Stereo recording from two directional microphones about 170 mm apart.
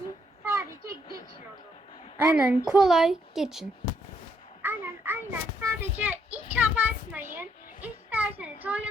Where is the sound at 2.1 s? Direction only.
10° right (ahead or behind).